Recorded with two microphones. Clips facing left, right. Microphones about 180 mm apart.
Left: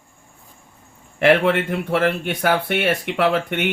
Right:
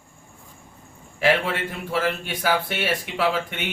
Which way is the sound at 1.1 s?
60° left (ahead or behind).